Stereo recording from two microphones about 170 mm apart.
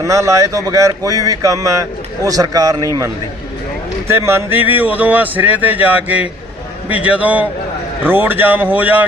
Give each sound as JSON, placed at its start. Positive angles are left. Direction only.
{"t": 0.0, "sound": "speech", "side_deg": -20}
{"t": 4.3, "sound": "speech", "side_deg": -15}